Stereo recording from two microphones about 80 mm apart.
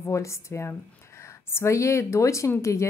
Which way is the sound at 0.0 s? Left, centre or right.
Left.